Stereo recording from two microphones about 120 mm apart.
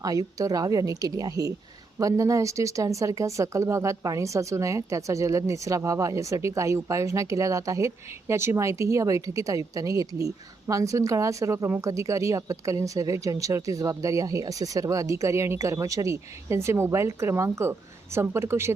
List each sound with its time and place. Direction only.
0.0 s speech: 30° right (ahead or behind)